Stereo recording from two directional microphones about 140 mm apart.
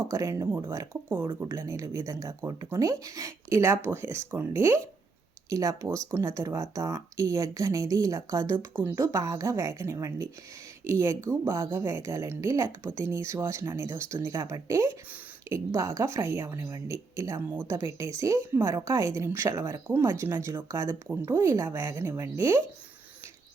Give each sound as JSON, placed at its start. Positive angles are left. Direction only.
{"t": 0.1, "sound": "a woman's voice", "side_deg": -25}